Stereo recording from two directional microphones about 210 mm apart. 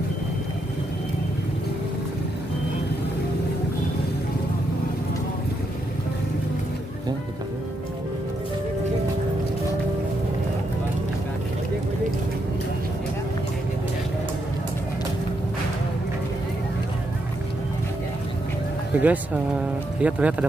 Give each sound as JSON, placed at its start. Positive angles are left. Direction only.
{"t": 18.9, "sound": "speech", "side_deg": -5}